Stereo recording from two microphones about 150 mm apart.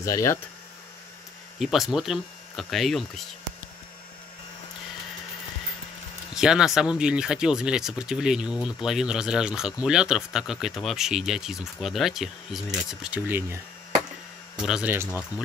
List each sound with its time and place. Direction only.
0.0 s speech: 20° left (ahead or behind)
1.6 s speech: centre (ahead or behind)
6.3 s speech: 5° right (ahead or behind)
14.6 s speech: 5° right (ahead or behind)